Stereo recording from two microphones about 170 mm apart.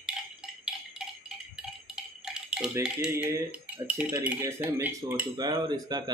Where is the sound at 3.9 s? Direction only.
10° right (ahead or behind).